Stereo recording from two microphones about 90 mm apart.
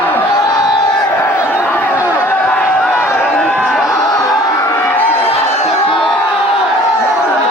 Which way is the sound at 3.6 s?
5° right (ahead or behind).